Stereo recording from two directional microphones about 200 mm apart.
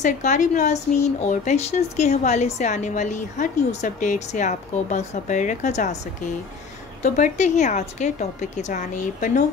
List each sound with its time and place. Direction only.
0.0 s a woman's voice: 35° left (ahead or behind)
7.0 s a woman's voice: 35° left (ahead or behind)